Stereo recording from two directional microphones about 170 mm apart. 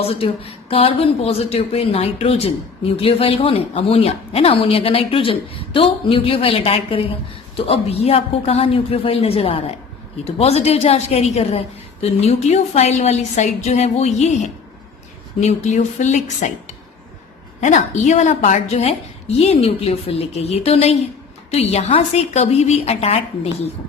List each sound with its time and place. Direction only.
0.0 s a woman's voice: 35° left (ahead or behind)
15.4 s a woman's voice: 45° left (ahead or behind)
17.6 s a woman's voice: 45° left (ahead or behind)